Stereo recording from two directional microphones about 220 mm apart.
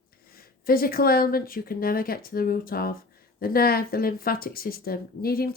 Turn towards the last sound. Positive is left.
turn(degrees=40)  # may be behind; listen again after turning